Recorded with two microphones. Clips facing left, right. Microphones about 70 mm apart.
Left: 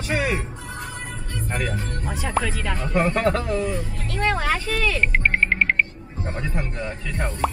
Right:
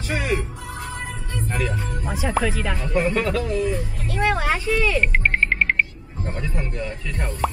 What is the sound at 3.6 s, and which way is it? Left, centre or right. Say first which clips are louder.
Music: right 2 dB; centre.